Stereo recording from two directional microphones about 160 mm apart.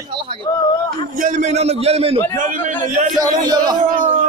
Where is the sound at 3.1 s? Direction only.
25° right (ahead or behind).